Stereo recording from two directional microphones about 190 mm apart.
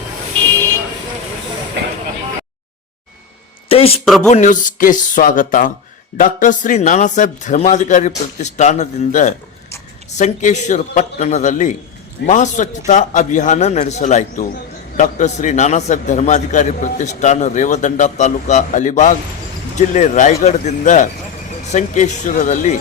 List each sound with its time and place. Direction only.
3.7 s speech: 30° left (ahead or behind)
4.3 s music: 40° left (ahead or behind)
6.1 s a man's voice: 45° left (ahead or behind)